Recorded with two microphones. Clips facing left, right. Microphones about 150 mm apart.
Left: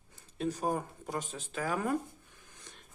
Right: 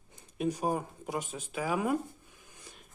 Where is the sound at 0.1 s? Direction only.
15° right (ahead or behind).